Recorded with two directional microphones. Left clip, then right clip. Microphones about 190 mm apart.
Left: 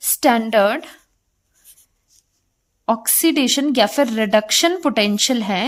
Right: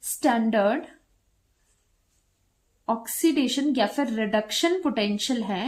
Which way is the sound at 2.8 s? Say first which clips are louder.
Left 6 dB; 50° left (ahead or behind).